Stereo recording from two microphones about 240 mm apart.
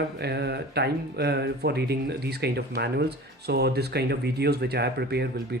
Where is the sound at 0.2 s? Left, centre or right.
Right.